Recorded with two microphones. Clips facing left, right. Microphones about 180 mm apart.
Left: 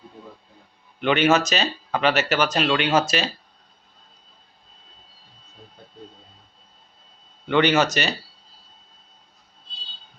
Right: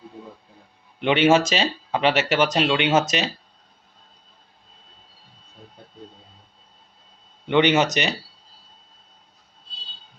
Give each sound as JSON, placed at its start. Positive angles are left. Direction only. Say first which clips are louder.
{"t": 1.0, "sound": "speech", "louder": "right 2 dB", "side_deg": -25}
{"t": 7.4, "sound": "speech", "louder": "right 1 dB", "side_deg": -20}